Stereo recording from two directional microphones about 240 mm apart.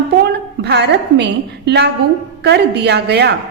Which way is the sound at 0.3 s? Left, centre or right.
Right.